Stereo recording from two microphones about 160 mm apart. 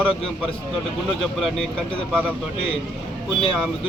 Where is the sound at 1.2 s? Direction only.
Centre (ahead or behind).